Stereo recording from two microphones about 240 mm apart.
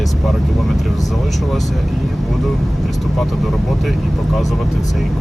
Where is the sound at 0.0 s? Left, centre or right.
Centre.